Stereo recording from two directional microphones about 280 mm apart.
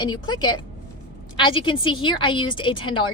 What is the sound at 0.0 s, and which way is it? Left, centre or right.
A woman's voice, centre.